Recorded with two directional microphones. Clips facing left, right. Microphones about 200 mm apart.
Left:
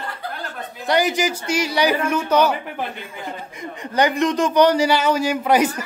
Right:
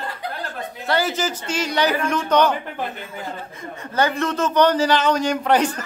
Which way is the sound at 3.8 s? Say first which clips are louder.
Left 3 dB; 15° left (ahead or behind).